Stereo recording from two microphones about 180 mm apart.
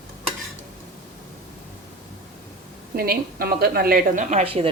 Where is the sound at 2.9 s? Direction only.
60° right (ahead or behind); by 4.7 s 30° right (ahead or behind).